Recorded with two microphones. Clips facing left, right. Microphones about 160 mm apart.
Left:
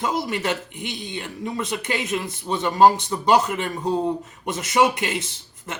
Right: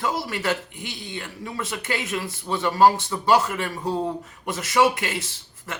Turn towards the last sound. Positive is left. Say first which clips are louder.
# left 1 dB
turn(degrees=20)  # may be behind; listen again after turning